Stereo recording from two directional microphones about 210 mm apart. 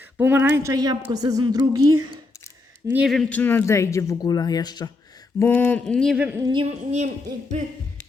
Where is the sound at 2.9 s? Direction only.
Centre (ahead or behind).